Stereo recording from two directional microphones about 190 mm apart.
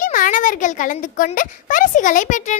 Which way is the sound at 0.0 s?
45° left (ahead or behind).